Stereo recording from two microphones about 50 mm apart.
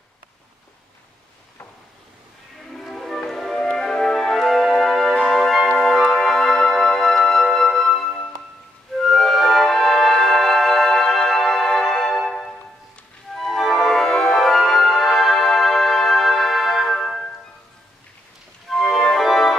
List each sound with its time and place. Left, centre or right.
2.9 s music: centre
5.1 s music: centre
5.4 s music: centre
18.7 s organ: centre